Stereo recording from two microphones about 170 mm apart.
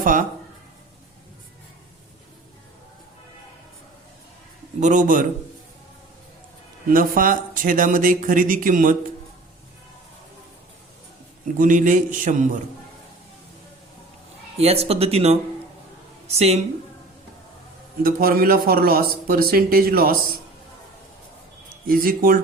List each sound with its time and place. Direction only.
0.0 s speech: 55° right (ahead or behind)
4.8 s speech: 45° right (ahead or behind)
6.9 s speech: 55° right (ahead or behind)
11.5 s speech: 50° right (ahead or behind)
14.6 s a woman's voice: 35° right (ahead or behind)
18.0 s a man's voice: 60° right (ahead or behind)
21.7 s speech: 60° right (ahead or behind)